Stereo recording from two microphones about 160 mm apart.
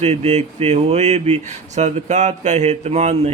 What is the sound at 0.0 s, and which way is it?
Speech, 45° right (ahead or behind).